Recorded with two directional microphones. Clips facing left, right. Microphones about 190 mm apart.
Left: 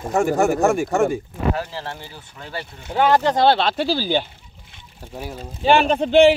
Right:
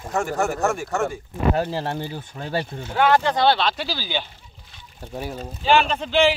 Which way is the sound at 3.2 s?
40° left (ahead or behind).